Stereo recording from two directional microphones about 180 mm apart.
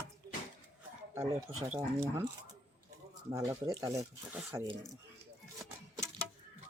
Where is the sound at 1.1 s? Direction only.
15° right (ahead or behind).